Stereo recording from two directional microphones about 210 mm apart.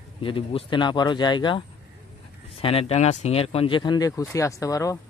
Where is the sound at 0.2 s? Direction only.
25° left (ahead or behind).